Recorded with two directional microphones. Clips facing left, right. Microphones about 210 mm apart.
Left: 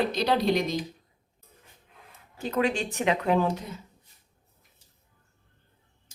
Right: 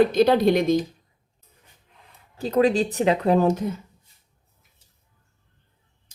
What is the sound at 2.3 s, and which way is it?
Speech, 35° right (ahead or behind).